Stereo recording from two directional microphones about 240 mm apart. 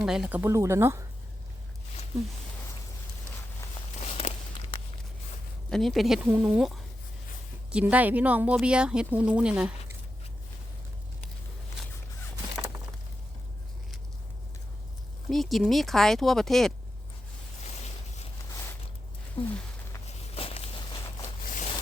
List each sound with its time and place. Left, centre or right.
0.0 s speech: centre
4.0 s walk: left
5.7 s speech: centre
15.3 s speech: centre
19.4 s a sound: left
20.3 s walk: left
21.4 s zipper: left